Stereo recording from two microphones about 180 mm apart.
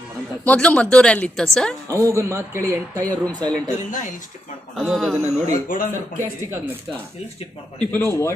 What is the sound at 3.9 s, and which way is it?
Speech, 45° left (ahead or behind).